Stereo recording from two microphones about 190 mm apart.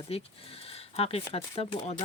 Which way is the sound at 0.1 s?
30° left (ahead or behind).